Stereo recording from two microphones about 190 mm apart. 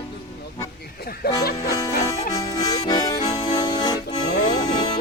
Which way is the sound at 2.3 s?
20° left (ahead or behind).